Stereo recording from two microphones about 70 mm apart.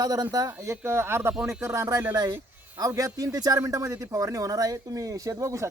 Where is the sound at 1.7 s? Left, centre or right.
Right.